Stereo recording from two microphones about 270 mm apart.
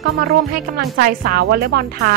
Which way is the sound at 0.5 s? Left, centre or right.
Right.